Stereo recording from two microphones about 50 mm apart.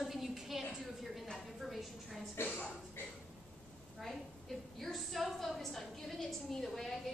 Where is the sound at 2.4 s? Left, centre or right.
Left.